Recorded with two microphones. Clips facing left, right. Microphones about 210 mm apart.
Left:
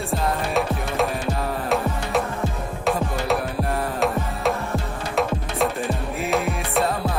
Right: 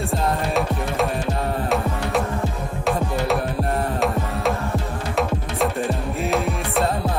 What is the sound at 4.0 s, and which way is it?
Music, centre (ahead or behind).